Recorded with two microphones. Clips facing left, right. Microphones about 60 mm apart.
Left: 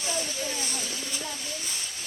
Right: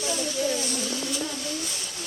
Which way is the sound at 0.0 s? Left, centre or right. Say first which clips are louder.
Right 5 dB; left.